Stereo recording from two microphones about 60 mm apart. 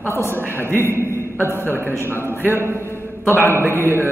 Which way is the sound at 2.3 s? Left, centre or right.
Right.